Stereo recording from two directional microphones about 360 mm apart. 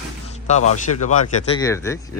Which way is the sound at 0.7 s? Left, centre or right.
Centre.